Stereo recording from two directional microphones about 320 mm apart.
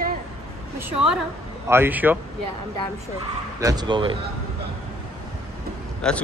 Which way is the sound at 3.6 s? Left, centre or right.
Centre.